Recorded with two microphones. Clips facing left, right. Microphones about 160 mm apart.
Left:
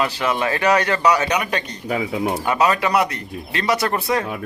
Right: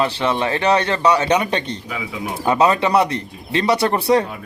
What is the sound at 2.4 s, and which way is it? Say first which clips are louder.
Speech: right 5 dB; 25° right (ahead or behind).